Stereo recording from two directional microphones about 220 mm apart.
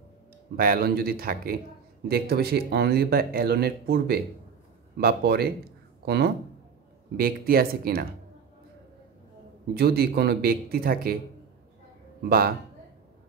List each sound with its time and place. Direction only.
0.6 s speech: 40° right (ahead or behind)
9.8 s speech: 45° right (ahead or behind)
12.2 s speech: 45° right (ahead or behind)